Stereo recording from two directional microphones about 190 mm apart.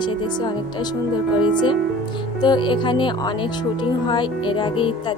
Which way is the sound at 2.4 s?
25° left (ahead or behind).